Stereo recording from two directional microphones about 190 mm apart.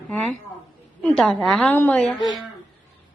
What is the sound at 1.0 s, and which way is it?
A woman's voice, 5° left (ahead or behind).